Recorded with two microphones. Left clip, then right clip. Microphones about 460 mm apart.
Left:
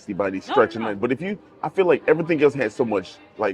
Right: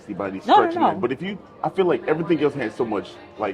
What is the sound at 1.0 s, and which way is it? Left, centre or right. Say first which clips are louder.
Speech: left 1 dB; left.